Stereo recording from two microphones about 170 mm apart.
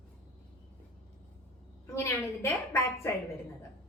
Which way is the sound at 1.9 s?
15° left (ahead or behind).